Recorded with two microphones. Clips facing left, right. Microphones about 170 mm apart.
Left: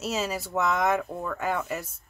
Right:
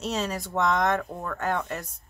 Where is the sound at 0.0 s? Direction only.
5° left (ahead or behind).